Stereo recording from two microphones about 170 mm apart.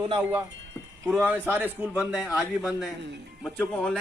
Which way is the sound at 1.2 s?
10° right (ahead or behind).